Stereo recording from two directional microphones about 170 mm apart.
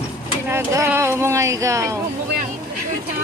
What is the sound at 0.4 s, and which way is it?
Speech, 15° right (ahead or behind).